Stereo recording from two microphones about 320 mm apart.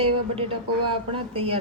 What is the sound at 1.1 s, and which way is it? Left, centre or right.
Speech, centre.